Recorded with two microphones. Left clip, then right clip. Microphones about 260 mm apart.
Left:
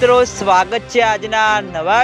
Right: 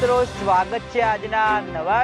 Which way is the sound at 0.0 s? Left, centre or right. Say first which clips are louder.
Left 7 dB; left.